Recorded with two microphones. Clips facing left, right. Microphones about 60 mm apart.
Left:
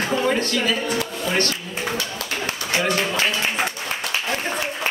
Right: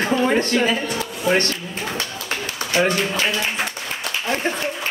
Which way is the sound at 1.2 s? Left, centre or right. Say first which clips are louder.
Right 6 dB; right.